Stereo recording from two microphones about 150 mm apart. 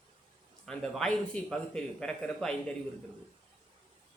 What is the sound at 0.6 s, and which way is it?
A man's voice, 5° left (ahead or behind).